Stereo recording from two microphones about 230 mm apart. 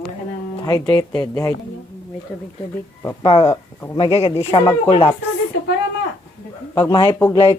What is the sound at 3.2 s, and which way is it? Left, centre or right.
Speech, left.